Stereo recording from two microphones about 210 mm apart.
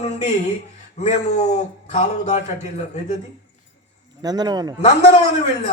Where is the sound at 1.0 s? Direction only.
35° left (ahead or behind).